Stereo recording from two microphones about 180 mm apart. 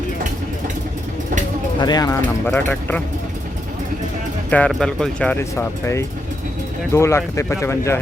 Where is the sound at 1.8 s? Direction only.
20° left (ahead or behind).